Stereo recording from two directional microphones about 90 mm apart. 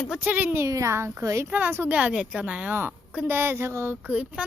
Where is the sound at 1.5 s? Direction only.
20° right (ahead or behind).